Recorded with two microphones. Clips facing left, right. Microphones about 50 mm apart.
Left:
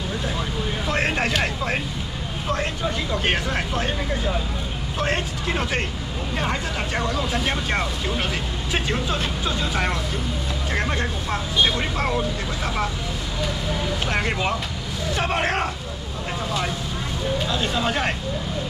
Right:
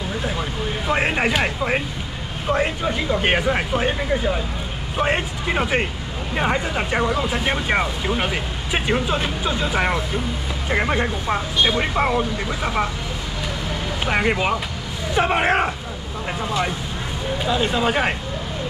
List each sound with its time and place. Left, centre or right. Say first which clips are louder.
0.4 s vehicle: right 1 dB; centre
2.5 s speech: right 5 dB; centre
14.0 s speech: right 6 dB; centre
17.5 s speech: right 8 dB; centre